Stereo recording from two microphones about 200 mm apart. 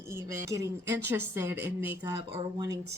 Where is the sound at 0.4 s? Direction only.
15° right (ahead or behind).